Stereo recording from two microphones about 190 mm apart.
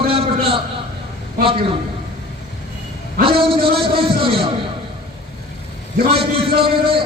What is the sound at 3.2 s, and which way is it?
A man's voice, 30° right (ahead or behind).